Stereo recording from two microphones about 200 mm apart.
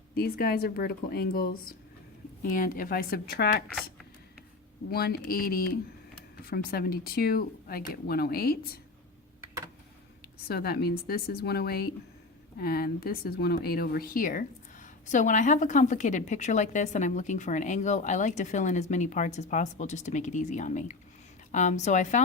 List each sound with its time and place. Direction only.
0.1 s speech: 50° left (ahead or behind)
4.9 s speech: 50° left (ahead or behind)
10.5 s speech: 50° left (ahead or behind); by 22.2 s 35° left (ahead or behind)